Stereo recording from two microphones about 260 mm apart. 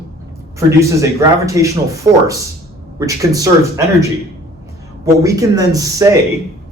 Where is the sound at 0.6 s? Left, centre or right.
Centre.